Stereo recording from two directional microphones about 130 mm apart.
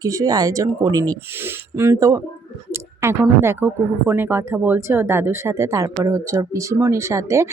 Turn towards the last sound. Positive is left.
turn(degrees=-20)  # may be behind; listen again after turning